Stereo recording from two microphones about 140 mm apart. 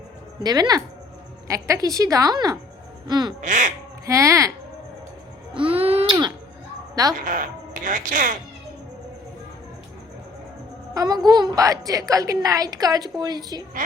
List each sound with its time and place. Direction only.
0.4 s a woman's voice: 30° right (ahead or behind)
3.1 s crow: 30° right (ahead or behind)
3.4 s speech: 65° right (ahead or behind)
4.0 s a woman's voice: 20° right (ahead or behind)
5.5 s a sound: 40° right (ahead or behind)
7.0 s a woman's voice: 25° right (ahead or behind)
7.9 s speech: 70° right (ahead or behind)
10.9 s a woman's voice: 30° right (ahead or behind)